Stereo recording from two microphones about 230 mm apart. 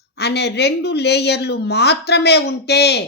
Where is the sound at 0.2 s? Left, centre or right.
Left.